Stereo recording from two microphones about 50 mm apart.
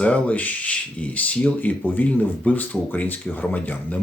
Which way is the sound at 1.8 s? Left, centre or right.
Left.